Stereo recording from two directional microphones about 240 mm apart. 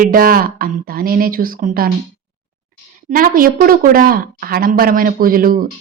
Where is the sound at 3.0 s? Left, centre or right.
Right.